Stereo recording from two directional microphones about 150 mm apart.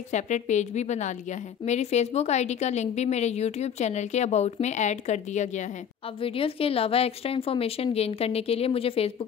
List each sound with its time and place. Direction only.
0.1 s a woman's voice: 50° left (ahead or behind)
6.2 s a woman's voice: 35° left (ahead or behind)